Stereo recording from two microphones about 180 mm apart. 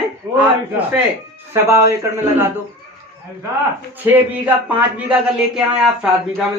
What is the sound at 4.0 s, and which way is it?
Speech, 10° right (ahead or behind).